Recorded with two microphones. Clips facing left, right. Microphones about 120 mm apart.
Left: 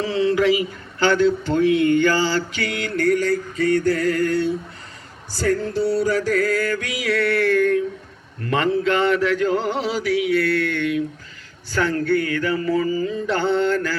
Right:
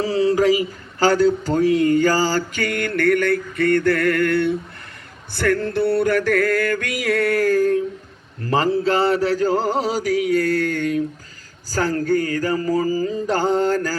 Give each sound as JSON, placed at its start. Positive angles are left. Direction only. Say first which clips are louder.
{"t": 0.0, "sound": "speech", "louder": "right 2 dB", "side_deg": -35}
{"t": 5.3, "sound": "music", "louder": "right 1 dB", "side_deg": -60}
{"t": 8.4, "sound": "a sound", "louder": "right 1 dB", "side_deg": -35}